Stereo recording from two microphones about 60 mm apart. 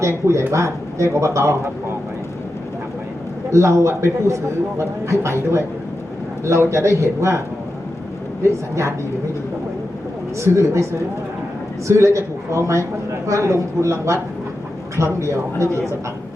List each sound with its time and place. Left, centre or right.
0.0 s a man's voice: right
3.5 s a man's voice: right
8.4 s a man's voice: right
10.4 s a man's voice: right
11.9 s a man's voice: right